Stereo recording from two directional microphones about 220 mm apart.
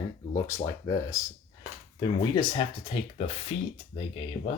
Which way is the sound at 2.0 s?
25° left (ahead or behind).